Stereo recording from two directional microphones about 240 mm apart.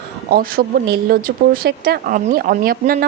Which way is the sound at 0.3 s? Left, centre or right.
Right.